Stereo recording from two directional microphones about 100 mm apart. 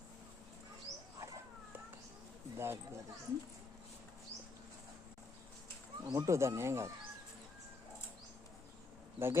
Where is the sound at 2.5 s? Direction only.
25° right (ahead or behind).